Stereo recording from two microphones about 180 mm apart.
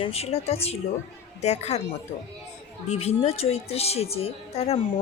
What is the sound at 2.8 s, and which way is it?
A woman's voice, 35° left (ahead or behind).